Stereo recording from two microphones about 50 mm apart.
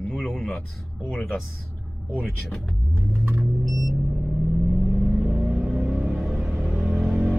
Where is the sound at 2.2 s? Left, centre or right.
Centre.